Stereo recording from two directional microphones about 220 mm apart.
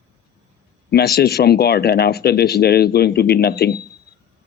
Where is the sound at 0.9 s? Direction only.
45° left (ahead or behind).